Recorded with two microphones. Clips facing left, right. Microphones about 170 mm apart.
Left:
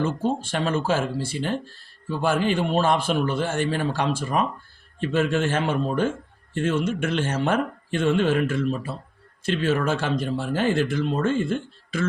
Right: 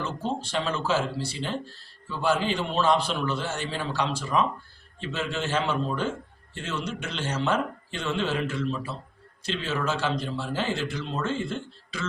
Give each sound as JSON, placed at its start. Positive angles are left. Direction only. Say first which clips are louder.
{"t": 0.4, "sound": "a man's voice", "louder": "left 4 dB", "side_deg": 50}